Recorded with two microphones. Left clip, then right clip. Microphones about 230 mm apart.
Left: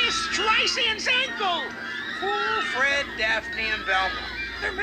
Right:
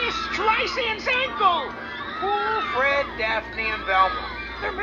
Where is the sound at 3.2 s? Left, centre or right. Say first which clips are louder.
Even; left.